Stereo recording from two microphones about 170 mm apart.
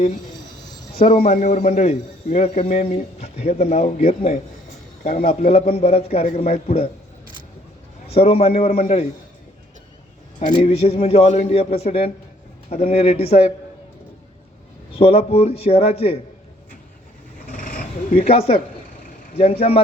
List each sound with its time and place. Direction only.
0.9 s speech: 40° left (ahead or behind)
8.0 s speech: 35° left (ahead or behind)
10.4 s speech: 40° left (ahead or behind)
14.9 s speech: 35° left (ahead or behind)
17.4 s vehicle: 55° left (ahead or behind)
18.2 s speech: 35° left (ahead or behind)